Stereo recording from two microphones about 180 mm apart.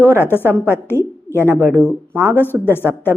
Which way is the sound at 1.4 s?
10° right (ahead or behind).